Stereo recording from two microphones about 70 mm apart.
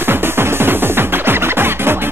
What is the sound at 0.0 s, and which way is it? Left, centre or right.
Music, right.